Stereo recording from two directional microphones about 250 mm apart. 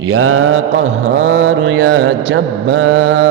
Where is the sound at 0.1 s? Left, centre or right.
Right.